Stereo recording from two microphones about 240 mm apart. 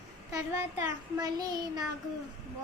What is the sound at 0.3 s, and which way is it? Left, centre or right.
Child singing, centre.